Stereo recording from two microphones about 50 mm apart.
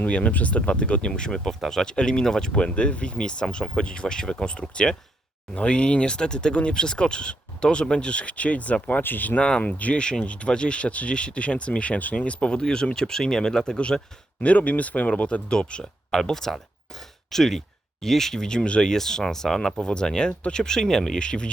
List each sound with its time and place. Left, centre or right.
0.0 s speech: left
9.0 s speech: left
9.4 s speech: left
9.7 s speech: left
10.0 s speech: centre
14.4 s speech: left